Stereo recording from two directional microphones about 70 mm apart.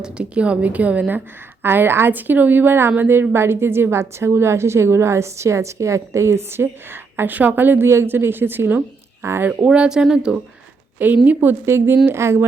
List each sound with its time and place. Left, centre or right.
0.0 s a woman's voice: centre
1.6 s a woman's voice: right
7.9 s speech: right
8.1 s a woman's voice: right
9.6 s speech: centre
11.3 s a woman's voice: right